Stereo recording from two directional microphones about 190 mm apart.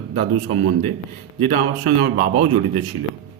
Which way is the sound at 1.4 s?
50° right (ahead or behind).